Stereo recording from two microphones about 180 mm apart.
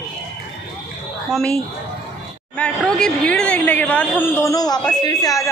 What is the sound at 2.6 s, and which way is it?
A woman's voice, 5° left (ahead or behind).